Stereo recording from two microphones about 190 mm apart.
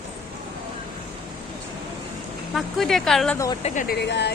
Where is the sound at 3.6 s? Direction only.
40° left (ahead or behind).